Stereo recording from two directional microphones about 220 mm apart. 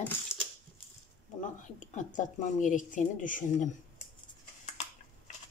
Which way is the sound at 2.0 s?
35° left (ahead or behind).